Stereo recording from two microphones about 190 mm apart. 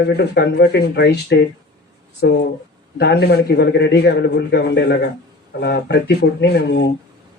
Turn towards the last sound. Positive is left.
turn(degrees=60)  # may be behind; listen again after turning